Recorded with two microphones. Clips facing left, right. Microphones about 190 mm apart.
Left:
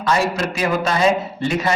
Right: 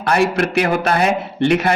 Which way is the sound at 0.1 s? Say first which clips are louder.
Right 4 dB; 65° right (ahead or behind).